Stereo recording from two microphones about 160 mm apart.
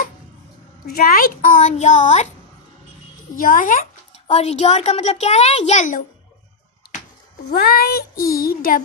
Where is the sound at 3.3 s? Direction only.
55° left (ahead or behind).